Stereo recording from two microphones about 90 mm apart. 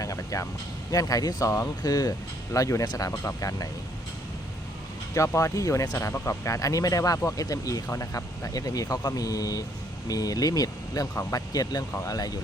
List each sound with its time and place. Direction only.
0.0 s a sound: 40° left (ahead or behind)
0.9 s speech: 45° left (ahead or behind)
2.8 s speech: 50° left (ahead or behind)
3.2 s speech: 40° left (ahead or behind)
5.1 s speech: 35° left (ahead or behind)